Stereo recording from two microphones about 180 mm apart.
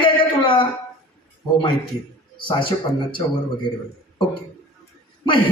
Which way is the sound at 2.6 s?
30° left (ahead or behind).